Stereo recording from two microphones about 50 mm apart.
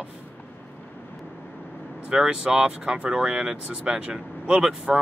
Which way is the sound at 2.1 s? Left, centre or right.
Centre.